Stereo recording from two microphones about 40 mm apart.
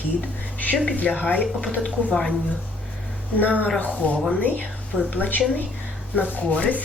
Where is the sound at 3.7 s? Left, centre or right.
Left.